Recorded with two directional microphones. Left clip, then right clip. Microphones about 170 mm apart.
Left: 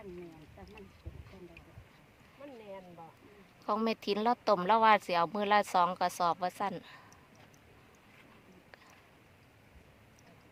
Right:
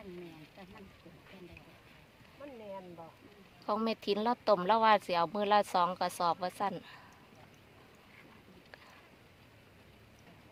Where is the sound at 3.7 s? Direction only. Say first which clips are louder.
Left 1 dB; 25° left (ahead or behind).